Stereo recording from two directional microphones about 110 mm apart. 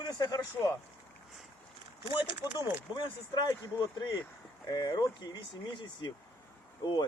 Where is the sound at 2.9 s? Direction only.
40° left (ahead or behind).